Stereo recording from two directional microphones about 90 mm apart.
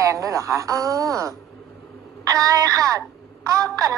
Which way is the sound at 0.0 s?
35° right (ahead or behind).